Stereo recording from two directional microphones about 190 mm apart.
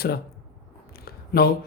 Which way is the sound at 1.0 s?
55° left (ahead or behind).